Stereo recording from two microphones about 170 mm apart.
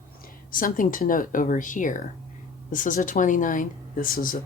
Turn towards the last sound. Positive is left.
turn(degrees=60)  # may be behind; listen again after turning